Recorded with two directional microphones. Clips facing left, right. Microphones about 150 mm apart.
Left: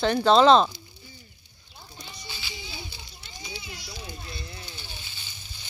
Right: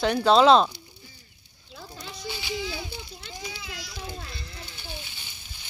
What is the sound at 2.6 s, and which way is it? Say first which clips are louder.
Children playing: right 8 dB; 90° right.